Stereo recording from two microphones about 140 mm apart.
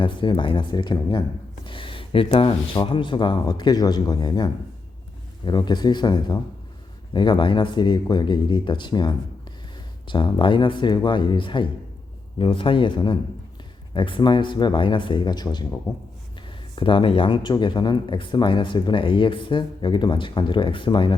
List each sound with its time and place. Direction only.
0.0 s speech: 35° left (ahead or behind)
5.5 s speech: 30° left (ahead or behind)
16.7 s speech: 35° left (ahead or behind)